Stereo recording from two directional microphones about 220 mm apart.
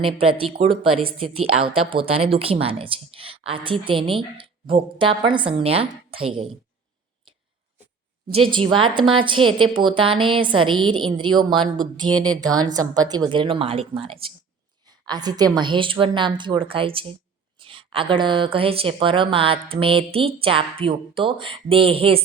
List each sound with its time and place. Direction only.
0.0 s speech: 25° right (ahead or behind)
8.3 s a woman's voice: 25° right (ahead or behind)